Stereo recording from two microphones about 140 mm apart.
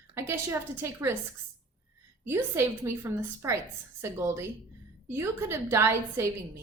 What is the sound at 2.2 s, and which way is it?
A woman's voice, 15° right (ahead or behind).